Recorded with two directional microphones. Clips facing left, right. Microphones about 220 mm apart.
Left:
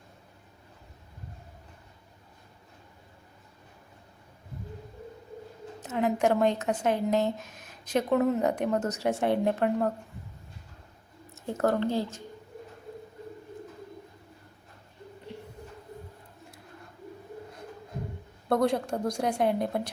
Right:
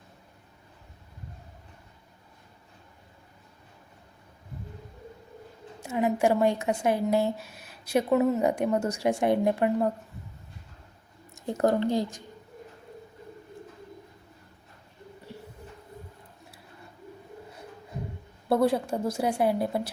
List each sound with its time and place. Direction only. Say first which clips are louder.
5.8 s speech: right 1 dB; 10° right (ahead or behind)
11.3 s speech: right 2 dB; 15° right (ahead or behind)
18.4 s a woman's voice: right 2 dB; 5° right (ahead or behind)